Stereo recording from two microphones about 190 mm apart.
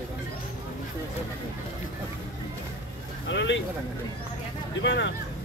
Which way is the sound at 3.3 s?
70° left (ahead or behind).